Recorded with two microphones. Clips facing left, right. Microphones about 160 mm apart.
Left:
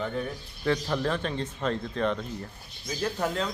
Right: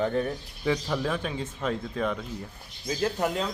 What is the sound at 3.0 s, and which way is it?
Speech, 15° right (ahead or behind).